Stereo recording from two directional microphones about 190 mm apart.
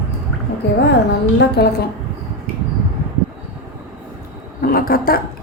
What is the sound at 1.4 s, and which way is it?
Speech, 60° left (ahead or behind).